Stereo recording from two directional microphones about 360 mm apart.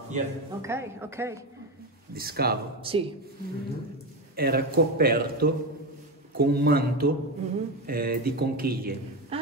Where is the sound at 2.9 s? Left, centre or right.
Centre.